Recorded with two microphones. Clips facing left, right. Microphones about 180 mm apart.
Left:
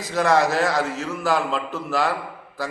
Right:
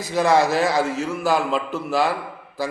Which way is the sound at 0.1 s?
15° right (ahead or behind).